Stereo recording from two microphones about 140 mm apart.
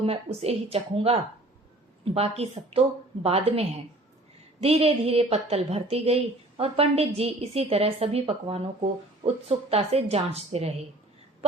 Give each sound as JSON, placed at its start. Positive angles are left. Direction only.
{"t": 0.0, "sound": "a woman's voice", "side_deg": -45}